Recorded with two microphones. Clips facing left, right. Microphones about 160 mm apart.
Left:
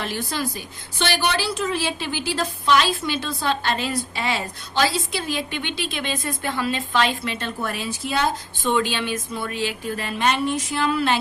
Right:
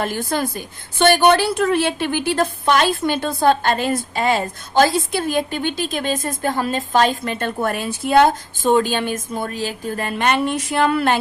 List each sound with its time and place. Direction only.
0.0 s a woman's voice: 50° right (ahead or behind)
8.7 s a woman's voice: 45° right (ahead or behind)